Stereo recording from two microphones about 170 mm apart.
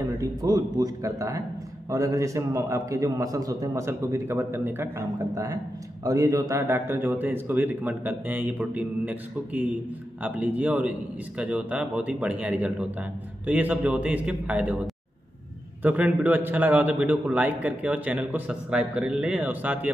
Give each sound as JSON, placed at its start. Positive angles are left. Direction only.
{"t": 0.2, "sound": "a man's voice", "side_deg": -20}